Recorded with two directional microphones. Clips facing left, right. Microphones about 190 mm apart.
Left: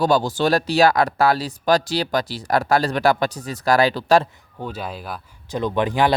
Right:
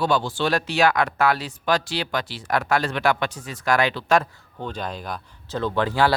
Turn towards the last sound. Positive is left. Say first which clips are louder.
# left 2 dB
turn(degrees=15)  # may be behind; listen again after turning